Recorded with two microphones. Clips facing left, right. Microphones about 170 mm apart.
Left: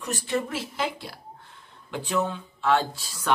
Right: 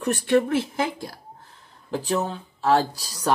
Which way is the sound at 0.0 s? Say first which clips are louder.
Right 8 dB; 60° right (ahead or behind).